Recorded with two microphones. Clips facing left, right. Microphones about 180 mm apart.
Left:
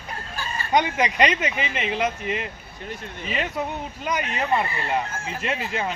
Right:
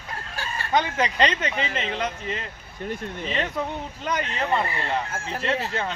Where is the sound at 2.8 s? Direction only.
45° right (ahead or behind).